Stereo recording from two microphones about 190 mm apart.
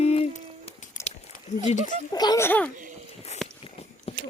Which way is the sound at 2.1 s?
20° left (ahead or behind).